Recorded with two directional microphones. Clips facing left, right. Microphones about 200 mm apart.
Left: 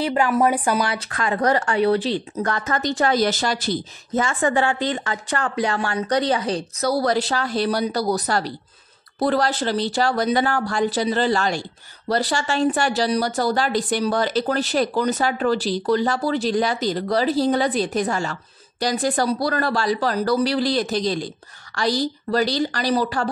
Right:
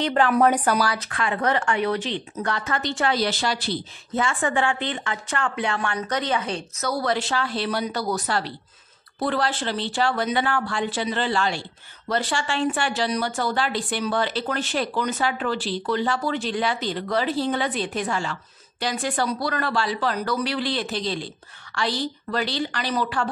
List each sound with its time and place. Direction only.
0.0 s speech: 10° left (ahead or behind)
0.8 s a woman's voice: 30° left (ahead or behind)